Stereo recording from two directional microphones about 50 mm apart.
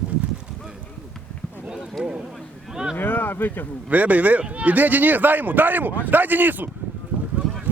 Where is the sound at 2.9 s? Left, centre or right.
Left.